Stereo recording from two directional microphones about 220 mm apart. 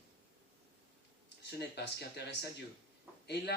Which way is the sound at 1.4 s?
50° left (ahead or behind).